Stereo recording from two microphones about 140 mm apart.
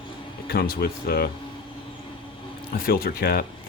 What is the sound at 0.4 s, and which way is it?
Speech, 90° left.